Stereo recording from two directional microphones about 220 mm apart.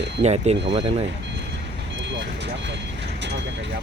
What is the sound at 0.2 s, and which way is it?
Speech, 30° right (ahead or behind).